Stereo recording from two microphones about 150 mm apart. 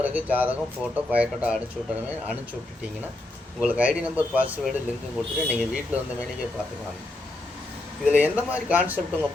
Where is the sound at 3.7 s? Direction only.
10° right (ahead or behind).